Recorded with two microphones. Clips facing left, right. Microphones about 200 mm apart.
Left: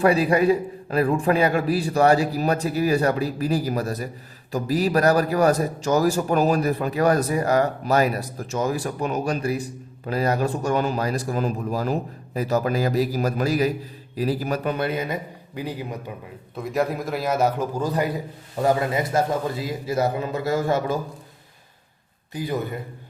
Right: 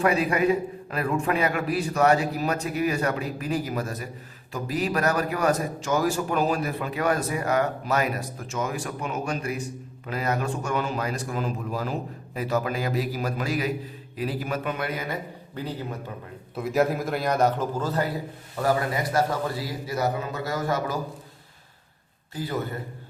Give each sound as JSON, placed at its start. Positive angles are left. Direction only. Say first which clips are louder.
{"t": 0.0, "sound": "a man's voice", "louder": "left 4 dB", "side_deg": 30}
{"t": 16.6, "sound": "a man's voice", "louder": "right 1 dB", "side_deg": 0}
{"t": 22.3, "sound": "a man's voice", "louder": "left 3 dB", "side_deg": 15}